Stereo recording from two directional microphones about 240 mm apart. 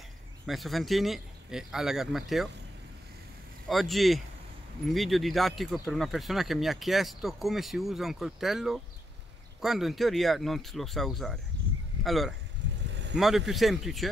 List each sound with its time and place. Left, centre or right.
0.5 s speech: centre
3.6 s speech: centre
12.9 s vehicle: right
13.2 s speech: centre